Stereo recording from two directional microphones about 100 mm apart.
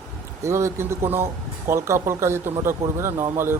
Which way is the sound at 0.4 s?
30° right (ahead or behind).